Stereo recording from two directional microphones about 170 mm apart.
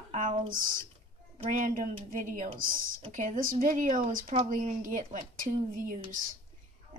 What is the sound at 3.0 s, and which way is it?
A child's voice, 45° right (ahead or behind).